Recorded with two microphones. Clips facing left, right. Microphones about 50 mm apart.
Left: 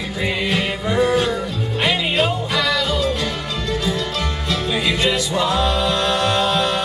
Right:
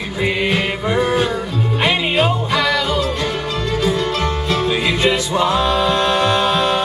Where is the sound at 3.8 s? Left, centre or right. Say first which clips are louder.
Right 5 dB; right.